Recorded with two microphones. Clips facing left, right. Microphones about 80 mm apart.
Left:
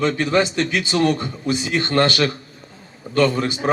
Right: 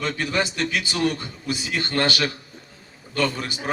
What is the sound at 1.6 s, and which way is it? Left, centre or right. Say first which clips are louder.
Speech: left 6 dB; left.